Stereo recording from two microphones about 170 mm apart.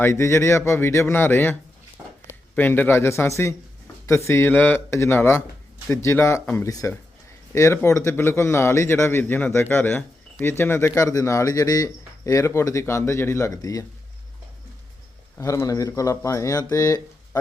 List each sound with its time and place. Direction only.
0.0 s speech: 15° left (ahead or behind)
2.6 s speech: 10° left (ahead or behind)
15.4 s speech: 20° left (ahead or behind)